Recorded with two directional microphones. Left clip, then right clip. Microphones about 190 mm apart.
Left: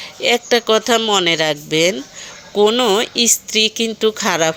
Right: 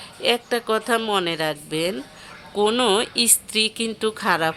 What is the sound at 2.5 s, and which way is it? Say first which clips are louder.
Speech: left 5 dB; 10° left (ahead or behind).